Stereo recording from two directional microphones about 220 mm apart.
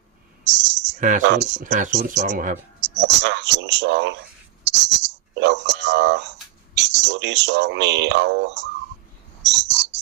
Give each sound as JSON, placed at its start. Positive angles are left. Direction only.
{"t": 0.4, "sound": "a sound", "side_deg": -55}
{"t": 0.9, "sound": "speech", "side_deg": -35}
{"t": 1.2, "sound": "speech", "side_deg": -55}
{"t": 1.6, "sound": "speech", "side_deg": -35}
{"t": 2.8, "sound": "speech", "side_deg": -55}
{"t": 9.4, "sound": "whispering", "side_deg": -55}